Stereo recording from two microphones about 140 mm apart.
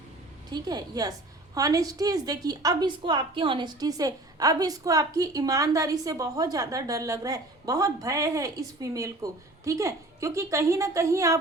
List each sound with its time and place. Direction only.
0.5 s a woman's voice: 30° right (ahead or behind)